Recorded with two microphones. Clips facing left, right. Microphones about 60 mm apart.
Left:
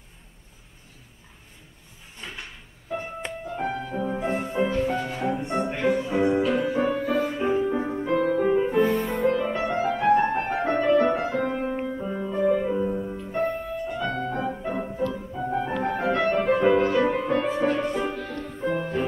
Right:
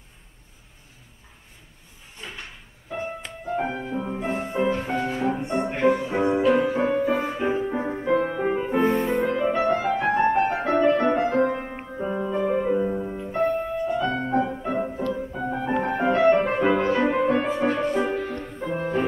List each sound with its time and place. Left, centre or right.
2.9 s music: centre
3.5 s music: centre
4.1 s music: centre
4.5 s music: right
8.2 s music: right
9.7 s music: right; by 13.3 s centre
13.4 s music: right
14.5 s music: centre
15.7 s music: centre
18.0 s music: centre
18.6 s music: right